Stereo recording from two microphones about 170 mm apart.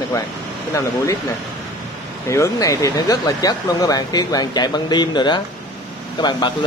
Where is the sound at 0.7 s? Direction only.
20° left (ahead or behind).